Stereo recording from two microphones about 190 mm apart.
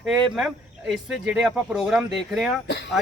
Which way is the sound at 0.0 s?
5° right (ahead or behind).